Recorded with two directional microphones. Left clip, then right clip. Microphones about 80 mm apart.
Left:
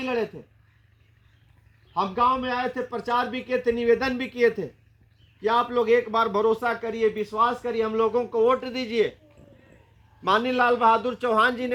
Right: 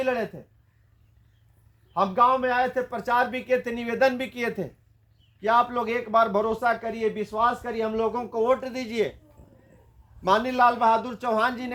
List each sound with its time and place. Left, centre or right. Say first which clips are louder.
0.0 s speech: right 1 dB; right
1.9 s speech: right 2 dB; right
5.4 s speech: even; right
10.2 s speech: right 1 dB; right